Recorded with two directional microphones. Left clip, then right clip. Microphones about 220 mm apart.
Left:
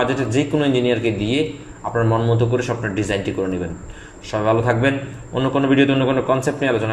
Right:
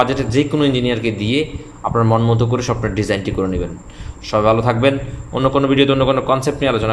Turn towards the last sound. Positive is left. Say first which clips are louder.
# right 2 dB
turn(degrees=-20)  # may be behind; listen again after turning